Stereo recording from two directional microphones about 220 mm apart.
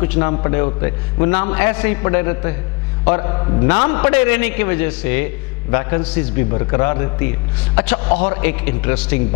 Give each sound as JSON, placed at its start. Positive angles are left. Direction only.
{"t": 0.0, "sound": "a man's voice", "side_deg": 15}